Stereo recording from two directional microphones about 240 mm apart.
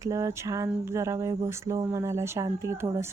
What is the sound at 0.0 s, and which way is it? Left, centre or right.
Speech, centre.